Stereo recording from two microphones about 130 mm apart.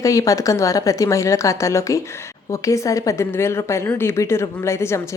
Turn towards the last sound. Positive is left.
turn(degrees=20)  # may be behind; listen again after turning